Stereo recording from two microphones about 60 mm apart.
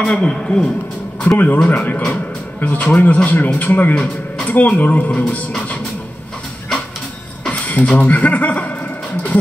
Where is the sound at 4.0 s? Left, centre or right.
Centre.